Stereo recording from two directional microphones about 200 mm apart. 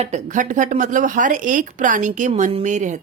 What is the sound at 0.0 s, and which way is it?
A woman's voice, 35° right (ahead or behind).